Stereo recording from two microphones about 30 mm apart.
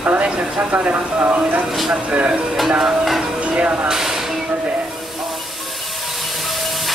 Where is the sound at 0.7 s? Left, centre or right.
Right.